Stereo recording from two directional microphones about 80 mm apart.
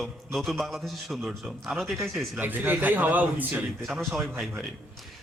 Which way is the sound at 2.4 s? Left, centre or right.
Right.